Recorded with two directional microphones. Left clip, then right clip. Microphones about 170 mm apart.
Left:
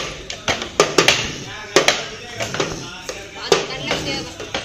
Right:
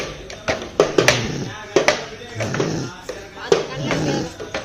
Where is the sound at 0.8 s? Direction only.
10° right (ahead or behind).